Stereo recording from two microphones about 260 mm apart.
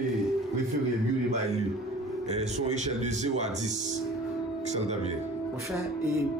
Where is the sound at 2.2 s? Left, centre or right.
Right.